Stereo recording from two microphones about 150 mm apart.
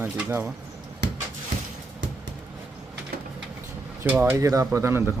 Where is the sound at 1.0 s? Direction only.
90° right.